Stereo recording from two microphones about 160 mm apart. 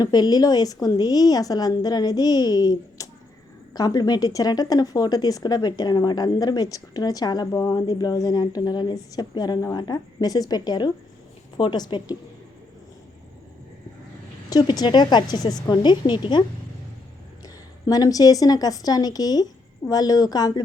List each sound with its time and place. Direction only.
0.0 s speech: 25° left (ahead or behind)
14.5 s speech: 25° left (ahead or behind)
17.4 s a woman's voice: 25° left (ahead or behind)